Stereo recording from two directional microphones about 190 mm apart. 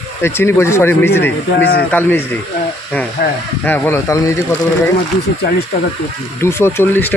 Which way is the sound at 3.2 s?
50° left (ahead or behind).